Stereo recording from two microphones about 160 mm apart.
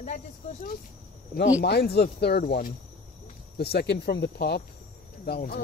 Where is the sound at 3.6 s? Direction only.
90° left.